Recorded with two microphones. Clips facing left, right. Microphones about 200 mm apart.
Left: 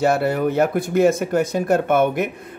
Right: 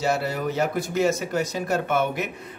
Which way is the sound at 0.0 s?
55° left (ahead or behind).